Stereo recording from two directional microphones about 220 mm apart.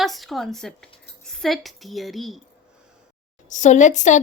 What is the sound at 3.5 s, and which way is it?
Speech, 35° left (ahead or behind).